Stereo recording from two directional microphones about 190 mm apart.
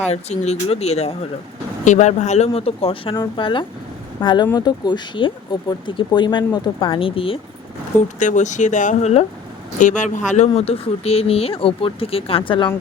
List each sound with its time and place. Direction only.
0.1 s speech: 35° left (ahead or behind)
8.2 s speech: 40° left (ahead or behind)